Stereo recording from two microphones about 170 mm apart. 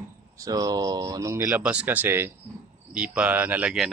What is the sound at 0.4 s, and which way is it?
Speech, 20° right (ahead or behind).